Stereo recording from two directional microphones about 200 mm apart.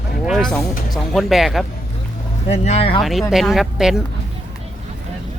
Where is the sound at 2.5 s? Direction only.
30° left (ahead or behind).